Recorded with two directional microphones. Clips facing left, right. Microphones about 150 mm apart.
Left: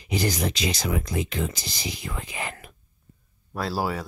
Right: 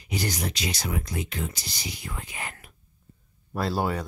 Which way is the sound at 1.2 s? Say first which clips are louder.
Left 4 dB; 90° left.